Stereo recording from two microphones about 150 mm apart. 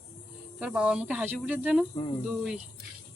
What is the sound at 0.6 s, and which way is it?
Speech, 5° right (ahead or behind).